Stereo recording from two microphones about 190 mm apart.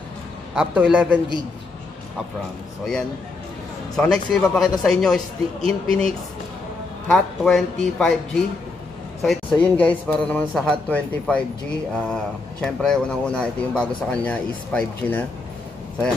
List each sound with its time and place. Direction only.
0.6 s a man's voice: 5° right (ahead or behind)
3.9 s speech: 5° left (ahead or behind)
9.2 s a man's voice: 5° left (ahead or behind)